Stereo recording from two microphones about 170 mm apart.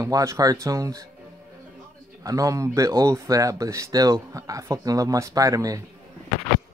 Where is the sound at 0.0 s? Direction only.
15° right (ahead or behind).